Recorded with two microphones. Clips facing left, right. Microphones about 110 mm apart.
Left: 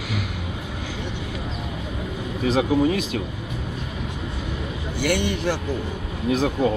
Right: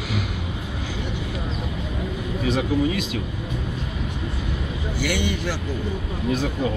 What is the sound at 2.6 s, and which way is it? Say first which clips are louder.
Speech: left 5 dB; 50° left (ahead or behind).